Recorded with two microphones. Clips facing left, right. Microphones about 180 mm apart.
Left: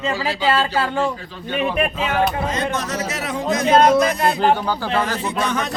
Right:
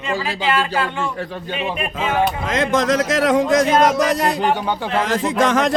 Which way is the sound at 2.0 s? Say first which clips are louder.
Right 5 dB; 90° right.